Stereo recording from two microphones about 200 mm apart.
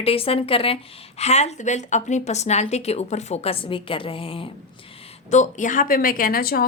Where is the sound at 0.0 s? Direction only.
30° left (ahead or behind).